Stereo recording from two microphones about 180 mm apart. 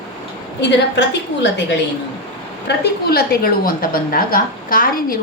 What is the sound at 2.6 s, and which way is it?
A woman's voice, 60° left (ahead or behind).